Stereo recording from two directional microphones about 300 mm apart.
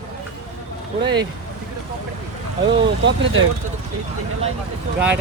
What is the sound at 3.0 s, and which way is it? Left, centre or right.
Speech, right.